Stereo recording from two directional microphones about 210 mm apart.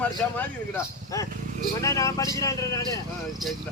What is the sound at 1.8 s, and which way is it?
Speech, 15° left (ahead or behind).